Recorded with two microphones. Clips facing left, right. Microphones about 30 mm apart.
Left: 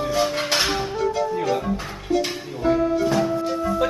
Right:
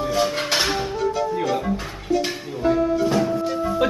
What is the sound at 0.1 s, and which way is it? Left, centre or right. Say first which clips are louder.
Music: even; centre.